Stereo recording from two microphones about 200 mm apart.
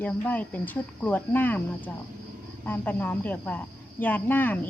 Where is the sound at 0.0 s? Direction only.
10° left (ahead or behind).